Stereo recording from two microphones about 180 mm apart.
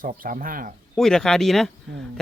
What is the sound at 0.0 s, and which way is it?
Speech, 50° right (ahead or behind).